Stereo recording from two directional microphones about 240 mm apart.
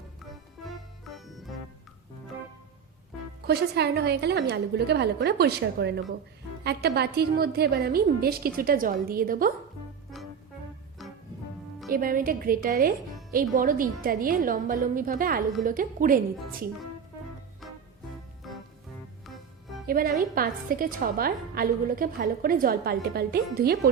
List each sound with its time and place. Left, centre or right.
0.3 s music: centre
3.4 s a woman's voice: right
11.0 s music: centre
11.9 s a woman's voice: right
19.9 s a woman's voice: right